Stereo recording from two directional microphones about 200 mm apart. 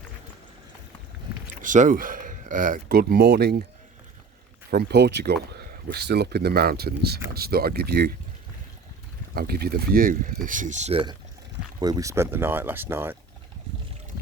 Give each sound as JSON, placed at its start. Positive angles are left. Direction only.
{"t": 1.6, "sound": "speech", "side_deg": -40}
{"t": 4.7, "sound": "speech", "side_deg": -55}
{"t": 9.3, "sound": "speech", "side_deg": -50}
{"t": 11.8, "sound": "speech", "side_deg": -20}